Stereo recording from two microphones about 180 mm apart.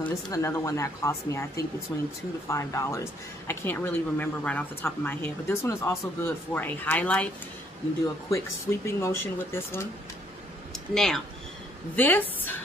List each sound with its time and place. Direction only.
0.0 s speech: 15° left (ahead or behind)
2.4 s speech: 15° left (ahead or behind)
8.3 s speech: 15° left (ahead or behind)
10.7 s speech: 5° left (ahead or behind)